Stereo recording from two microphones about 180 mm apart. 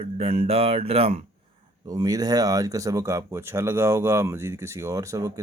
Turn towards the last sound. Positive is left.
turn(degrees=-15)  # may be behind; listen again after turning